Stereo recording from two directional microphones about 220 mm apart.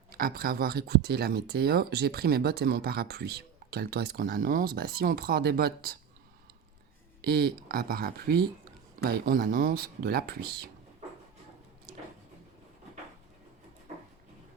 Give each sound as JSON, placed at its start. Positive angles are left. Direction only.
{"t": 0.1, "sound": "speech", "side_deg": -40}
{"t": 7.2, "sound": "speech", "side_deg": -45}